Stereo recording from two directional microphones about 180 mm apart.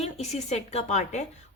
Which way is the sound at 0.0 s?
35° left (ahead or behind).